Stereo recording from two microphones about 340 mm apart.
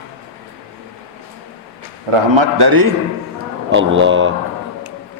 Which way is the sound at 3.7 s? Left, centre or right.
Right.